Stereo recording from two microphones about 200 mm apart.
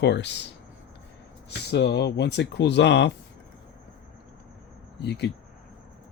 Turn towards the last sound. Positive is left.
turn(degrees=55)  # may be behind; listen again after turning